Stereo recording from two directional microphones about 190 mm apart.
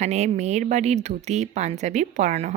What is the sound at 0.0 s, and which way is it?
A woman's voice, 35° right (ahead or behind).